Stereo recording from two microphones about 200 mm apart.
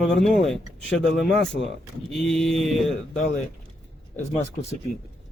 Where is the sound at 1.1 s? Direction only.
60° left (ahead or behind).